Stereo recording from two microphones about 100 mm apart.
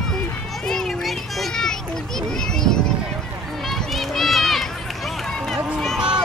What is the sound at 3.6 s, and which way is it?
Run, centre (ahead or behind).